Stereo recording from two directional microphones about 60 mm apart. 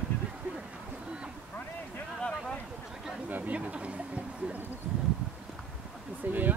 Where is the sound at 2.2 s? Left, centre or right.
Centre.